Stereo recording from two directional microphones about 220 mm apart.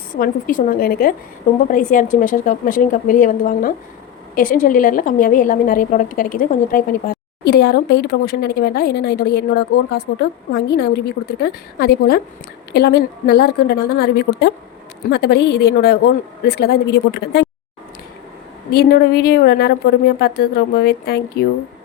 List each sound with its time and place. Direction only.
0.1 s a woman's voice: 40° left (ahead or behind)
18.7 s a woman's voice: 45° left (ahead or behind)